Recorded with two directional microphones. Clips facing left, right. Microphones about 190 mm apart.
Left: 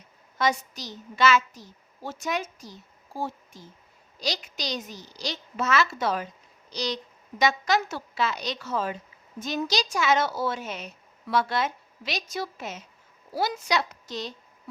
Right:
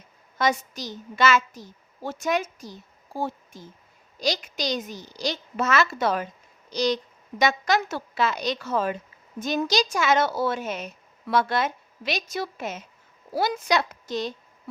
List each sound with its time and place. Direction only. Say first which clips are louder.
0.3 s a woman's voice: right 2 dB; 50° right (ahead or behind)